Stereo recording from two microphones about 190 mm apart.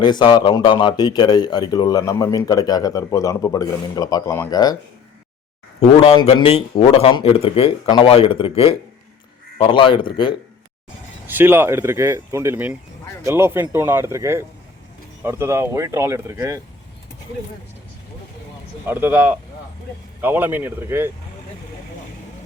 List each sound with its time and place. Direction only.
0.0 s speech: 25° left (ahead or behind)
5.8 s speech: 30° left (ahead or behind)
11.3 s speech: 10° right (ahead or behind)
18.9 s speech: 10° right (ahead or behind)